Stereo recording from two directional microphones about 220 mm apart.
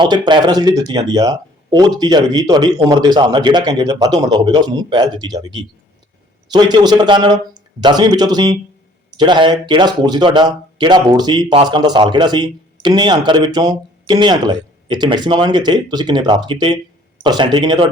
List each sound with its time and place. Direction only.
0.0 s speech: 20° right (ahead or behind)
6.5 s speech: 20° right (ahead or behind)